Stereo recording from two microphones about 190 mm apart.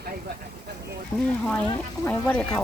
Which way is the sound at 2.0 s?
10° left (ahead or behind).